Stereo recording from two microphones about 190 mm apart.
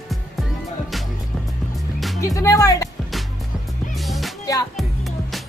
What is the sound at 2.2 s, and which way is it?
Music, 15° left (ahead or behind).